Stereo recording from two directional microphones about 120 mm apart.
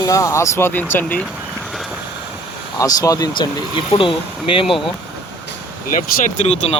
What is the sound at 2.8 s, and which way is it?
Speech, 30° left (ahead or behind).